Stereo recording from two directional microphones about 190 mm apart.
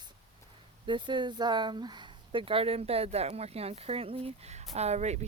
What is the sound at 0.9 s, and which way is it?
A woman's voice, 25° right (ahead or behind).